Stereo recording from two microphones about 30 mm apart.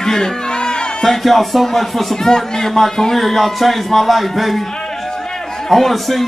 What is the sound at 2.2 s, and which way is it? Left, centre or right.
Speech, centre.